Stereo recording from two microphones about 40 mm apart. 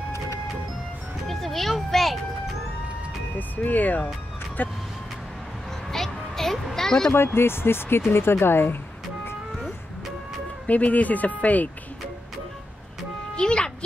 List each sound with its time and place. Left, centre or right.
1.3 s music: centre
3.3 s speech: left
5.9 s a sound: centre
7.3 s speech: left
10.7 s speech: left
13.4 s music: left